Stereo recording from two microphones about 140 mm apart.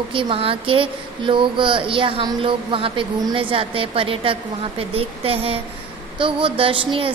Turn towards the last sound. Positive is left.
turn(degrees=-40)  # may be behind; listen again after turning